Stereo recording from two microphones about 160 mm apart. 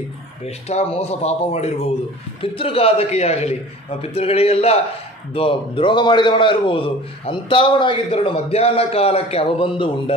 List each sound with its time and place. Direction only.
0.5 s a man's voice: 40° left (ahead or behind)